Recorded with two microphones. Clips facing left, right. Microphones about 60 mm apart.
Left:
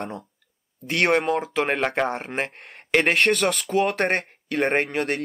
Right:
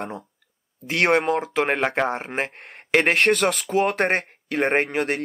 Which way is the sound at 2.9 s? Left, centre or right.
Centre.